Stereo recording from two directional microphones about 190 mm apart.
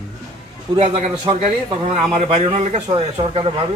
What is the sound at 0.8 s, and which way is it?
A man's voice, 35° right (ahead or behind).